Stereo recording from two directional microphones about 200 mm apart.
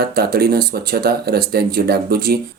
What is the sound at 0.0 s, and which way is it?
Speech, 50° right (ahead or behind).